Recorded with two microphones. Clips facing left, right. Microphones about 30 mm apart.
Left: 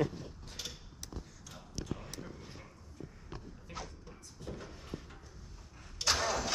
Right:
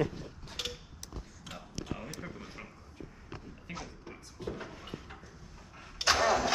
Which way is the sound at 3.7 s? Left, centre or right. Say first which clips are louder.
Right 3 dB; right.